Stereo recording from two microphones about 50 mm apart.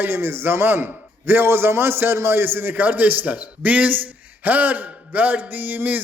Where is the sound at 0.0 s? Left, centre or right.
Right.